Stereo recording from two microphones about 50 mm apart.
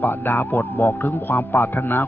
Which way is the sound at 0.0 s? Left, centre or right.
Left.